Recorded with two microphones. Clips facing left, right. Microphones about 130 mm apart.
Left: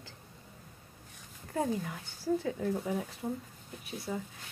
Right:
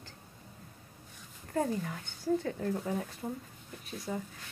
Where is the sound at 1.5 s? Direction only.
10° left (ahead or behind).